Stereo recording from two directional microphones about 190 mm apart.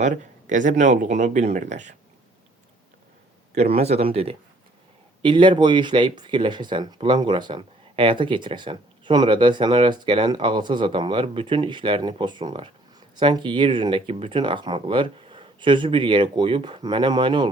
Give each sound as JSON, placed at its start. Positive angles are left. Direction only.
{"t": 0.0, "sound": "speech", "side_deg": -40}
{"t": 3.5, "sound": "speech", "side_deg": -35}